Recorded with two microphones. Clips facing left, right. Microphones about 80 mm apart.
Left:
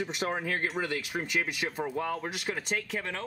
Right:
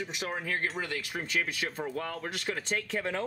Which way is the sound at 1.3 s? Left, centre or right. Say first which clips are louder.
Even; centre.